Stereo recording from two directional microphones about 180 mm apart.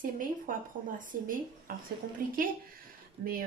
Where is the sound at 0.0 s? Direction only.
50° right (ahead or behind).